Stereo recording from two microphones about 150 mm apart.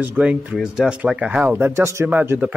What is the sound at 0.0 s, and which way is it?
Speech, 10° right (ahead or behind).